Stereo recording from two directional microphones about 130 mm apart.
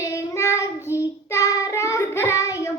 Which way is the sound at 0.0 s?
25° left (ahead or behind).